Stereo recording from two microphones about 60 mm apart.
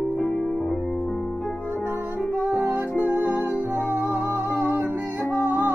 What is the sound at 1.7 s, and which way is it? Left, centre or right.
Music, right.